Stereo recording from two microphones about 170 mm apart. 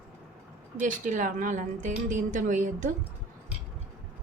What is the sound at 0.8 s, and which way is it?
Speech, 50° right (ahead or behind).